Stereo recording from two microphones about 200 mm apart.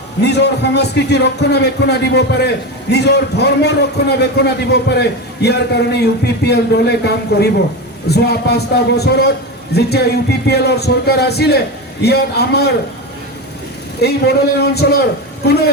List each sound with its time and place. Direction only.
0.2 s speech: 60° left (ahead or behind)
14.0 s speech: 55° left (ahead or behind)